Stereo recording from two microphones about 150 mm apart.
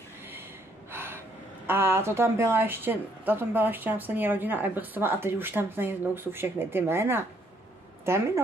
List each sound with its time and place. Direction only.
0.9 s gasp: 15° right (ahead or behind)
1.7 s a woman's voice: 15° right (ahead or behind)